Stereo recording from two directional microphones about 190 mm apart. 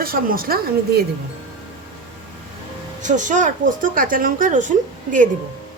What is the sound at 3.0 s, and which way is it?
A woman's voice, 40° right (ahead or behind).